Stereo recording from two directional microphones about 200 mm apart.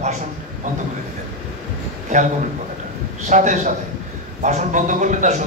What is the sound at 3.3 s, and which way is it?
A man's voice, 35° right (ahead or behind).